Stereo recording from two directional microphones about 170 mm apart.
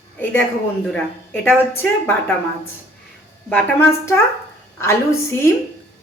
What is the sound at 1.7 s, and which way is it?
Speech, 10° left (ahead or behind).